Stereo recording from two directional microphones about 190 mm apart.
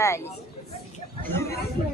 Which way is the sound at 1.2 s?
15° left (ahead or behind).